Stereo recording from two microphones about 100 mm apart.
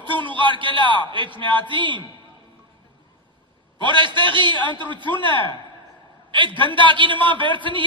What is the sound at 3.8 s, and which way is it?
A man's voice, 50° right (ahead or behind).